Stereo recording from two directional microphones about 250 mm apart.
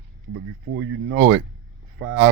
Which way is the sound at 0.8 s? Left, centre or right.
Right.